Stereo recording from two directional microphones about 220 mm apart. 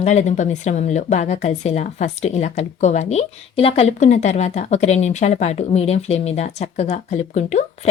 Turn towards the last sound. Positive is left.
turn(degrees=30)  # may be behind; listen again after turning